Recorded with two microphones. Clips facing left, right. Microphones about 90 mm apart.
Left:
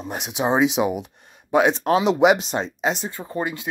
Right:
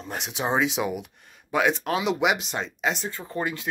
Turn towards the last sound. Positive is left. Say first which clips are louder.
# left 3 dB
turn(degrees=15)  # may be behind; listen again after turning